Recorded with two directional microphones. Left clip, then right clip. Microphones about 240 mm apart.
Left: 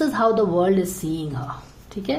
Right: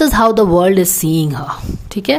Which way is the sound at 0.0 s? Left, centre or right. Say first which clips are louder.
Right 8 dB; right.